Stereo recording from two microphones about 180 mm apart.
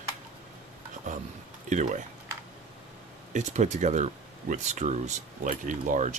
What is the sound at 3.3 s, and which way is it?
Speech, 40° right (ahead or behind).